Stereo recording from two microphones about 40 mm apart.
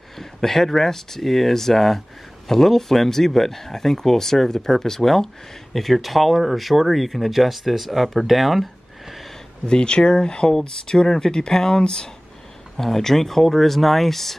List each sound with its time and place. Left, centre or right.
0.2 s speech: centre
9.7 s speech: left; by 14.3 s centre